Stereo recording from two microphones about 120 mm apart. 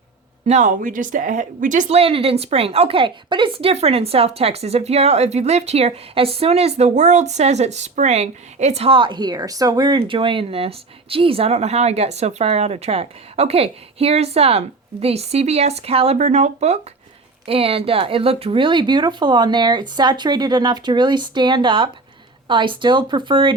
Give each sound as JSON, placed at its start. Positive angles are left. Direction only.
{"t": 0.4, "sound": "speech", "side_deg": -80}
{"t": 16.1, "sound": "speech", "side_deg": -65}
{"t": 17.4, "sound": "speech", "side_deg": -50}